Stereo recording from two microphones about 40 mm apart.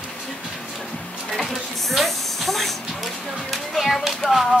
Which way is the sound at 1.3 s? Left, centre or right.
Centre.